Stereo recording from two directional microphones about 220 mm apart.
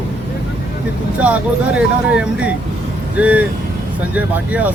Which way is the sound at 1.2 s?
5° right (ahead or behind).